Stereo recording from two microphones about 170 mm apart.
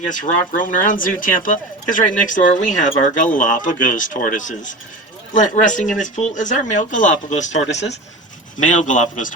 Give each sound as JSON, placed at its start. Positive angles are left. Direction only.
{"t": 0.1, "sound": "speech", "side_deg": 50}